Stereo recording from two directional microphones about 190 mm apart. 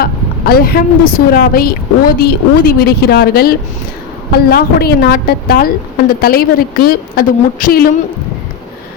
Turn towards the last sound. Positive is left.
turn(degrees=50)  # may be behind; listen again after turning